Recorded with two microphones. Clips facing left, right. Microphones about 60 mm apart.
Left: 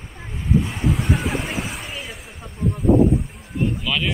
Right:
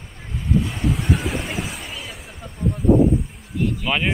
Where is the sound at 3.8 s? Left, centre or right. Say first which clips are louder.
Right 2 dB; right.